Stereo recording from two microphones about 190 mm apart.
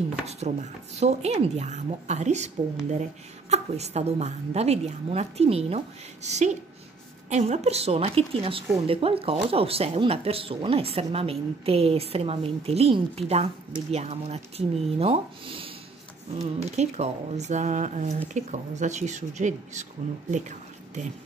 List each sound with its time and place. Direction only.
0.3 s speech: 35° right (ahead or behind)
16.7 s speech: 35° right (ahead or behind)